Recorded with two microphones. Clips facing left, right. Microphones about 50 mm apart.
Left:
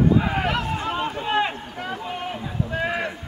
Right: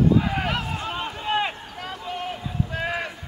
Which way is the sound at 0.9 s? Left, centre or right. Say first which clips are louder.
Left 1 dB; centre.